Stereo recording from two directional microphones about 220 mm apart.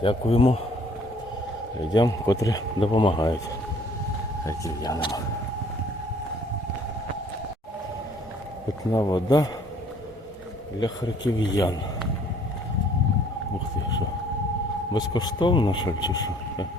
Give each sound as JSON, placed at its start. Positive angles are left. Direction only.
{"t": 0.0, "sound": "speech", "side_deg": 25}
{"t": 1.9, "sound": "speech", "side_deg": 15}
{"t": 4.4, "sound": "speech", "side_deg": 15}
{"t": 8.9, "sound": "speech", "side_deg": 20}
{"t": 10.8, "sound": "speech", "side_deg": 20}
{"t": 11.2, "sound": "speech", "side_deg": 60}
{"t": 14.9, "sound": "speech", "side_deg": 20}